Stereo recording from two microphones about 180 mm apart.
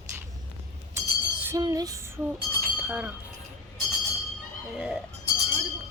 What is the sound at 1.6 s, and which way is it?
Female singing, 20° right (ahead or behind).